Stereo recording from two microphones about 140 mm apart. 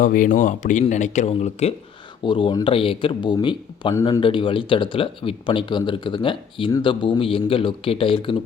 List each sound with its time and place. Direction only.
0.0 s speech: 75° left (ahead or behind); by 1.7 s 50° left (ahead or behind)
2.2 s speech: 35° left (ahead or behind)